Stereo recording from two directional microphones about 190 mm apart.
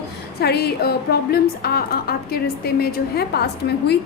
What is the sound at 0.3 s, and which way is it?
A woman's voice, 55° left (ahead or behind).